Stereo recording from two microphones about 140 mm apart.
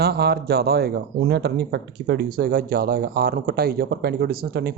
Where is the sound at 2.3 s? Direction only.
90° right.